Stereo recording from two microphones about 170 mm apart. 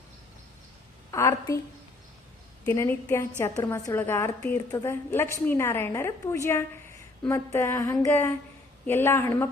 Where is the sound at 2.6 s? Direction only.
15° left (ahead or behind).